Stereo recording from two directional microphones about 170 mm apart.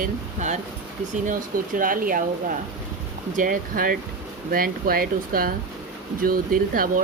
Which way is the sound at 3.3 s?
50° right (ahead or behind).